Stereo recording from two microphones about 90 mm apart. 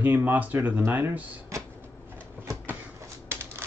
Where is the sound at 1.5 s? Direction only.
35° right (ahead or behind).